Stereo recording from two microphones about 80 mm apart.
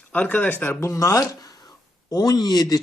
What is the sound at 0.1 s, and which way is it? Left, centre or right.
Speech, centre.